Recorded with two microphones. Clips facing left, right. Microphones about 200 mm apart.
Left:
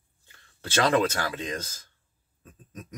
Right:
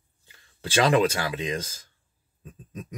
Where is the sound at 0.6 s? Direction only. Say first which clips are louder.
Right 2 dB; 10° right (ahead or behind).